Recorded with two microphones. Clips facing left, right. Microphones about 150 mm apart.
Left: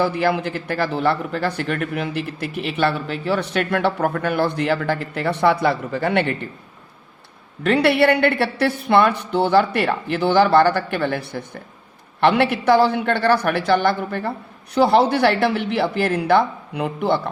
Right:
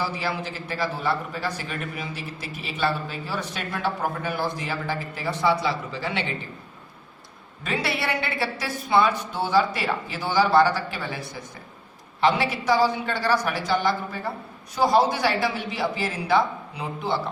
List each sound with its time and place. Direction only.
0.0 s speech: 60° left (ahead or behind)
7.6 s speech: 65° left (ahead or behind)